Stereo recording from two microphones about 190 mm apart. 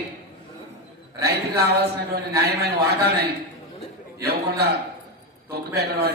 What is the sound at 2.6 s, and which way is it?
Speech, 55° right (ahead or behind).